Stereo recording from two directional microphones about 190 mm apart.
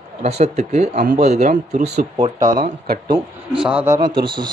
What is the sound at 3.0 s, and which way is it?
Speech, 25° right (ahead or behind).